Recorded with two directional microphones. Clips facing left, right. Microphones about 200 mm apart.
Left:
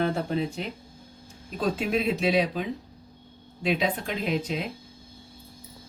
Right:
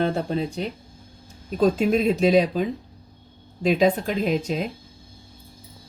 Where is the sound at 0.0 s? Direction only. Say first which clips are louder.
Right 3 dB; 35° right (ahead or behind).